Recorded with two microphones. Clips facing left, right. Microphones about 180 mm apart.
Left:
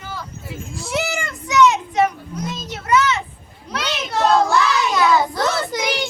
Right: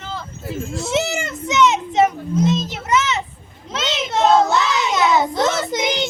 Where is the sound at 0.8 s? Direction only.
25° right (ahead or behind).